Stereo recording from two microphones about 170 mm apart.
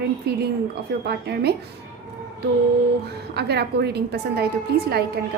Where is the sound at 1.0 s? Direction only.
75° right (ahead or behind).